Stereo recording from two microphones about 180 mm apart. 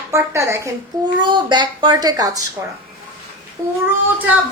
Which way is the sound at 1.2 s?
25° right (ahead or behind).